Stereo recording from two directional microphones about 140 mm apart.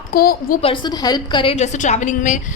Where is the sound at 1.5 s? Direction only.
55° left (ahead or behind).